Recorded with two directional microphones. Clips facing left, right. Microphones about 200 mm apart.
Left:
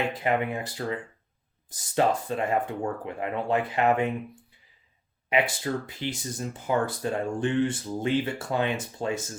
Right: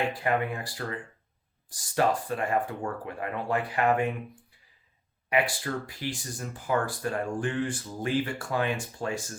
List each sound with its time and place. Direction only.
0.1 s speech: 20° left (ahead or behind)
5.3 s speech: 20° left (ahead or behind)